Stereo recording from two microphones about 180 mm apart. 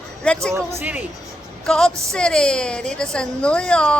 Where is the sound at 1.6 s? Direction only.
5° left (ahead or behind).